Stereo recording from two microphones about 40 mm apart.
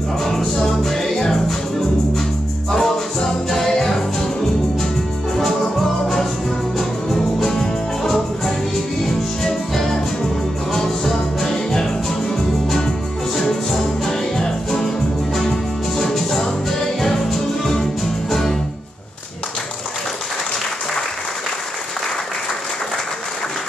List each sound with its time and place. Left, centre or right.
0.2 s music: centre
2.7 s music: centre
5.3 s music: centre
16.0 s music: centre